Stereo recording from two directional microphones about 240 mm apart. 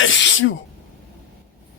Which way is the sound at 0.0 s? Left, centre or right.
Left.